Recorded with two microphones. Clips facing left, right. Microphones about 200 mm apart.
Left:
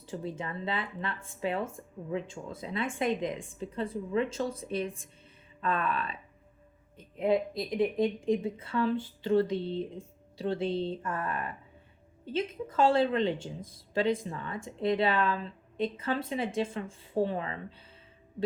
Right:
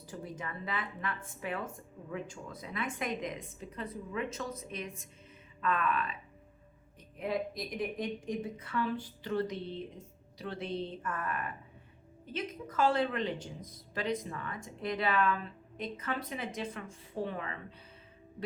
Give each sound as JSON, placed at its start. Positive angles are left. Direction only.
{"t": 0.0, "sound": "speech", "side_deg": 25}
{"t": 7.2, "sound": "speech", "side_deg": 25}